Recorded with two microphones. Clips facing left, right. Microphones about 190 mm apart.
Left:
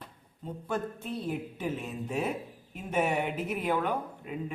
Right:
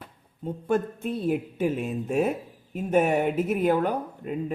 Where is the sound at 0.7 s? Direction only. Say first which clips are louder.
Right 8 dB; 50° right (ahead or behind).